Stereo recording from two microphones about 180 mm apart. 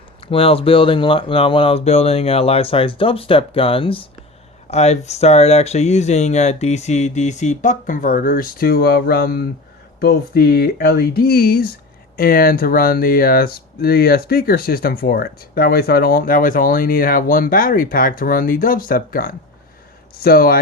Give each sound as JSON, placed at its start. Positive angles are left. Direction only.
{"t": 0.2, "sound": "speech", "side_deg": 30}